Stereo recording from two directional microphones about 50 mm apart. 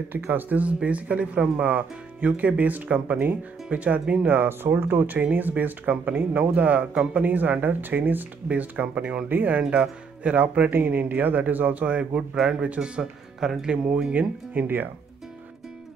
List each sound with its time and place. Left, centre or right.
0.3 s speech: right
1.7 s speech: right
4.3 s speech: right
10.7 s speech: right
13.4 s speech: centre
14.1 s speech: right